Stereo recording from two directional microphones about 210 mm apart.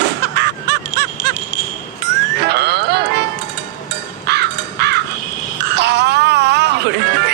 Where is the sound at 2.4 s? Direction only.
50° right (ahead or behind).